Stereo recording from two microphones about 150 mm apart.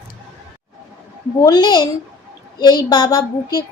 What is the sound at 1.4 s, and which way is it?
A woman's voice, 25° left (ahead or behind).